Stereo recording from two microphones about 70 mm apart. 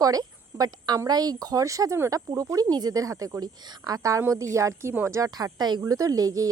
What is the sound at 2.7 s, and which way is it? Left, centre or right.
A woman's voice, right.